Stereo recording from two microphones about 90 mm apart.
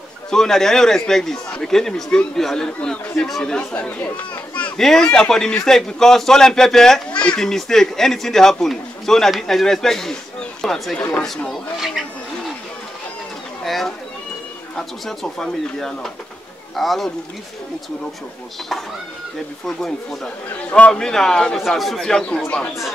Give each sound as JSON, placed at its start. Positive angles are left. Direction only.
{"t": 0.3, "sound": "a man's voice", "side_deg": 5}
{"t": 11.0, "sound": "a man's voice", "side_deg": 15}
{"t": 11.2, "sound": "speech", "side_deg": 5}
{"t": 13.7, "sound": "a sound", "side_deg": 0}
{"t": 14.8, "sound": "speech", "side_deg": 5}
{"t": 20.7, "sound": "a man's voice", "side_deg": 10}